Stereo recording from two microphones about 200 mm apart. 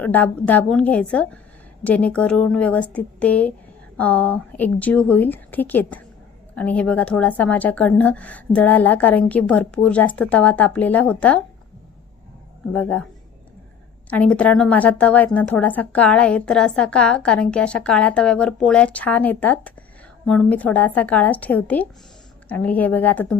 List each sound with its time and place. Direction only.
0.0 s speech: 10° left (ahead or behind)
12.7 s speech: 5° left (ahead or behind)
14.1 s a woman's voice: 5° left (ahead or behind)